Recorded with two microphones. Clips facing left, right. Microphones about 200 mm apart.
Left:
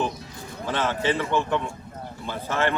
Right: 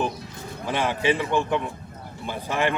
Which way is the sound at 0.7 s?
15° right (ahead or behind).